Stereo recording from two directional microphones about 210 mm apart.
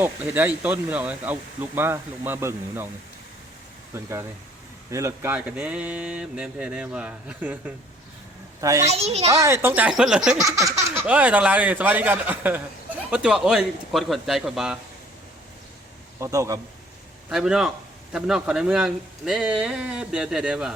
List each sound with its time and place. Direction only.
0.0 s speech: 10° right (ahead or behind)
3.9 s speech: 15° right (ahead or behind)
8.9 s a child's voice: 30° right (ahead or behind)
9.3 s speech: 15° right (ahead or behind)
10.4 s speech: 15° right (ahead or behind)
16.2 s speech: 15° right (ahead or behind)
17.2 s speech: 5° right (ahead or behind)